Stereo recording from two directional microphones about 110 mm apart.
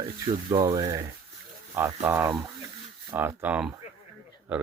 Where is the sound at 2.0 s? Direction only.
25° right (ahead or behind).